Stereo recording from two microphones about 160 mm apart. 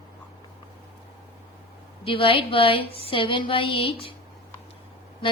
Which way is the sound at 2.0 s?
35° left (ahead or behind).